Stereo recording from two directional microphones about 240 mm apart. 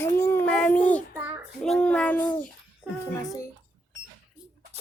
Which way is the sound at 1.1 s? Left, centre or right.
Centre.